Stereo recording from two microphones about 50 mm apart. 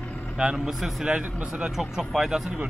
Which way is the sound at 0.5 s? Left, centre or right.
Centre.